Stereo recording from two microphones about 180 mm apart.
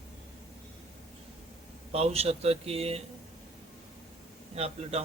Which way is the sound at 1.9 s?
35° right (ahead or behind).